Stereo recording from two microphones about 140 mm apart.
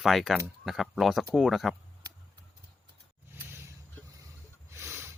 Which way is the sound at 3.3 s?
15° right (ahead or behind).